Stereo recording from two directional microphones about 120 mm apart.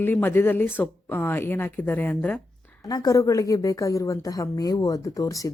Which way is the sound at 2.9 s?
30° left (ahead or behind).